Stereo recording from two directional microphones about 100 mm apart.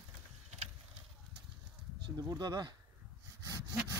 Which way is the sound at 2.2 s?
40° right (ahead or behind).